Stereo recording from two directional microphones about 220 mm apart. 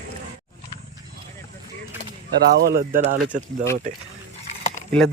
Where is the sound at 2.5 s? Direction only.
45° right (ahead or behind).